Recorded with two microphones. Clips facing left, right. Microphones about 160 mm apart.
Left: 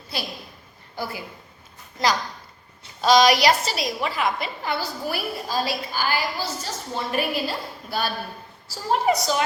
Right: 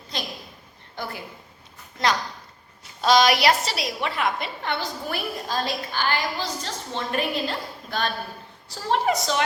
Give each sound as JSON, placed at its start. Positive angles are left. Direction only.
{"t": 0.1, "sound": "a woman's voice", "side_deg": 10}
{"t": 3.0, "sound": "a woman's voice", "side_deg": 0}